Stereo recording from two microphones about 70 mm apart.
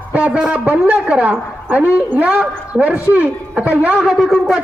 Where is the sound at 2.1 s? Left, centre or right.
Centre.